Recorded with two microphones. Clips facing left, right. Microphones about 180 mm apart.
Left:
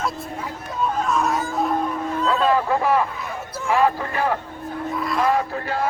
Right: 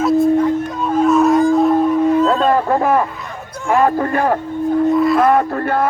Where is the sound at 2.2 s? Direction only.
50° right (ahead or behind).